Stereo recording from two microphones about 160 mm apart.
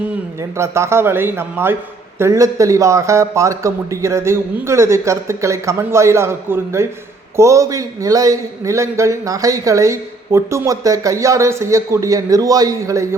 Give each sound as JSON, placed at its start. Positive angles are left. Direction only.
{"t": 0.5, "sound": "a man's voice", "side_deg": -15}